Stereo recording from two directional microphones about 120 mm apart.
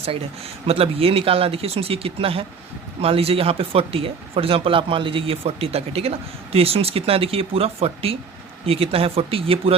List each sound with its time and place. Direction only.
0.7 s speech: 50° right (ahead or behind)